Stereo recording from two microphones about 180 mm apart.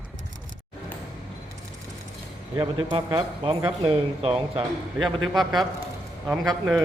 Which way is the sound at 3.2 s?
30° right (ahead or behind).